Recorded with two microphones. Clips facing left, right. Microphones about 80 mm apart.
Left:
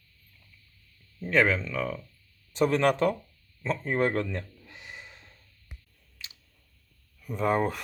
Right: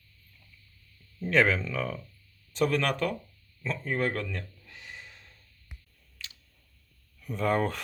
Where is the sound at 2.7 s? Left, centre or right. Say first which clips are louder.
Left 5 dB; left.